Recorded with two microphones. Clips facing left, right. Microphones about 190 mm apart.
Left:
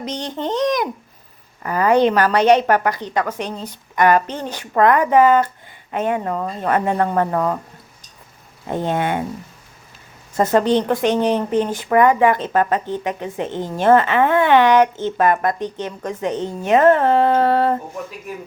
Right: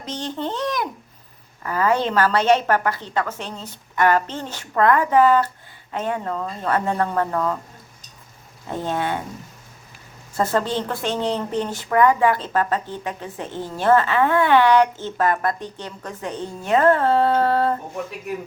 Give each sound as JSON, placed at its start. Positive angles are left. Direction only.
{"t": 0.0, "sound": "a child's voice", "side_deg": 15}
{"t": 8.7, "sound": "a woman's voice", "side_deg": 20}
{"t": 10.3, "sound": "a woman's voice", "side_deg": 20}